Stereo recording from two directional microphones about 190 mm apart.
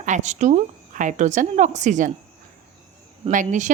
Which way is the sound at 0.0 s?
40° right (ahead or behind).